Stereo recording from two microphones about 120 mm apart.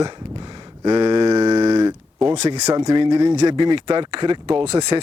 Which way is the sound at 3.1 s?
60° right (ahead or behind).